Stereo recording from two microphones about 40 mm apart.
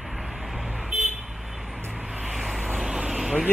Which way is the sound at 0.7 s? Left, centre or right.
Centre.